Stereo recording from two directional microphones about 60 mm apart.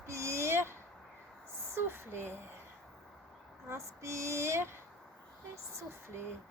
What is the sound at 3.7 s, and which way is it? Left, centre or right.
Speech, right.